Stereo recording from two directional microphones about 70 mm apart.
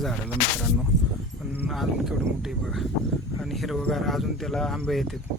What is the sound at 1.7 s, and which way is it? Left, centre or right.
Speech, centre.